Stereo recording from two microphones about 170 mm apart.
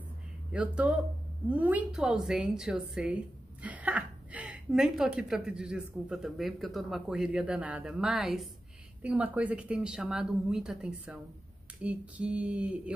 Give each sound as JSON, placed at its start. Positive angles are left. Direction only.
{"t": 0.5, "sound": "a woman's voice", "side_deg": -5}